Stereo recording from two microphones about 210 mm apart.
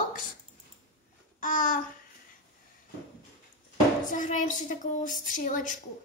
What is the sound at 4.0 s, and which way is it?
Child singing, 35° left (ahead or behind).